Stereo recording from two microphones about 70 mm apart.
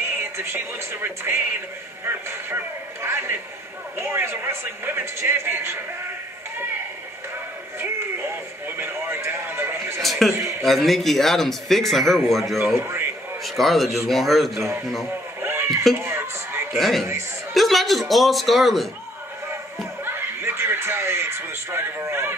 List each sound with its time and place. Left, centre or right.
0.2 s music: right
1.0 s a man's voice: right
8.6 s a man's voice: right
10.0 s a man's voice: centre
12.6 s a man's voice: right
13.4 s a man's voice: centre
15.4 s a sound: right
16.0 s music: right
16.7 s a man's voice: centre
20.1 s chuckle: right